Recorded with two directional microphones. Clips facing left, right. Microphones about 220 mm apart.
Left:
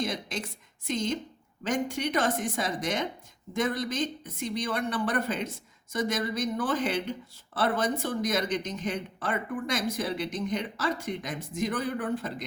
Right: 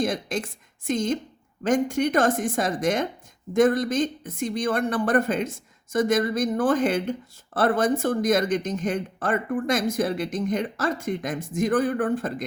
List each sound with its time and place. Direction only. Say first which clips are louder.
0.0 s speech: right 6 dB; 50° right (ahead or behind)